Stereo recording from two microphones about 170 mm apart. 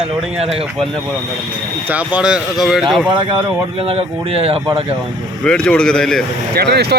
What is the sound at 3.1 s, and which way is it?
Speech, 30° right (ahead or behind).